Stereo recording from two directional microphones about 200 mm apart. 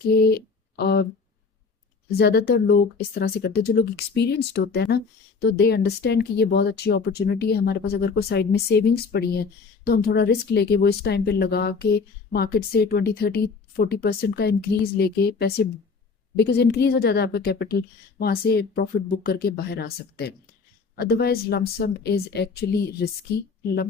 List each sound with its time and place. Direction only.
0.0 s speech: 50° left (ahead or behind)
2.0 s speech: 50° left (ahead or behind)